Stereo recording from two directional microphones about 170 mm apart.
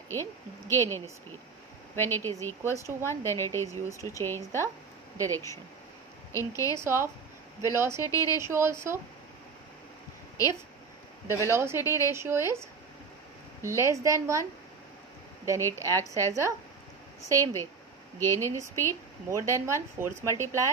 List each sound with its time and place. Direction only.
0.1 s a woman's voice: 15° left (ahead or behind)
2.7 s speech: 15° right (ahead or behind)
3.1 s a woman's voice: 15° left (ahead or behind)
5.1 s speech: 20° right (ahead or behind)
6.3 s a woman's voice: 20° left (ahead or behind)
6.7 s speech: 15° right (ahead or behind)
8.0 s a woman's voice: 20° left (ahead or behind)
8.4 s speech: 15° right (ahead or behind)
11.3 s speech: 15° right (ahead or behind)
11.8 s a woman's voice: 20° left (ahead or behind)
12.1 s speech: 15° right (ahead or behind)
18.2 s a woman's voice: 15° left (ahead or behind)
19.2 s speech: 15° right (ahead or behind)